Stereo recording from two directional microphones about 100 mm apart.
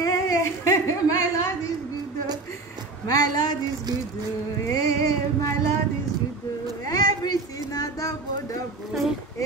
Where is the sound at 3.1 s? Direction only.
40° left (ahead or behind).